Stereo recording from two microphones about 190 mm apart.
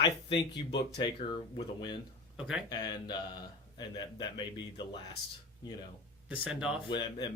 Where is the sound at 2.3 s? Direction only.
5° right (ahead or behind).